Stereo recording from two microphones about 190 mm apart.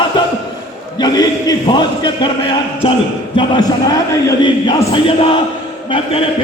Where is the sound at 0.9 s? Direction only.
20° left (ahead or behind).